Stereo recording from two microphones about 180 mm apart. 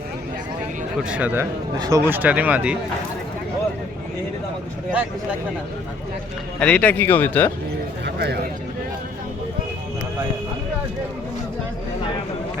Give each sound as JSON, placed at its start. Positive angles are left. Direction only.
{"t": 1.0, "sound": "speech", "side_deg": -5}
{"t": 6.6, "sound": "speech", "side_deg": 5}
{"t": 8.0, "sound": "a sound", "side_deg": -65}